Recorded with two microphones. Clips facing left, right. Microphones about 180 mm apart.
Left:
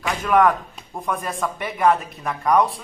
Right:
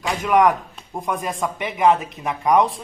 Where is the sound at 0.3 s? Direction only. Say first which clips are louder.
Right 1 dB; 15° right (ahead or behind).